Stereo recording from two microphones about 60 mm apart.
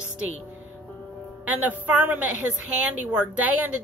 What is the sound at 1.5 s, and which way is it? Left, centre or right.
A woman's voice, right.